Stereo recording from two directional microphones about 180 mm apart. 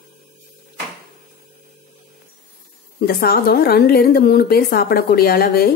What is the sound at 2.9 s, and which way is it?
A woman's voice, 55° left (ahead or behind).